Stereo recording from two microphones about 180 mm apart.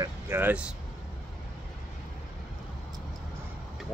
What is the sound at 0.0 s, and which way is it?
Speech, 15° right (ahead or behind).